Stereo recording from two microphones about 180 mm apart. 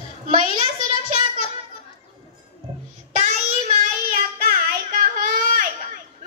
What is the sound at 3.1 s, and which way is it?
Child singing, 40° right (ahead or behind).